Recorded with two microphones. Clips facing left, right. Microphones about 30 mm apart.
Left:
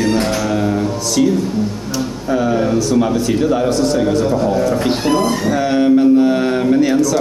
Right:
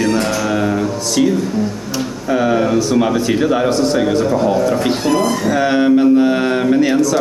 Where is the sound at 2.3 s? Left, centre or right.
Centre.